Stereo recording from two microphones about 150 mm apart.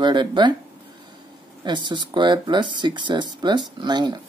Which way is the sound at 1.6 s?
30° right (ahead or behind).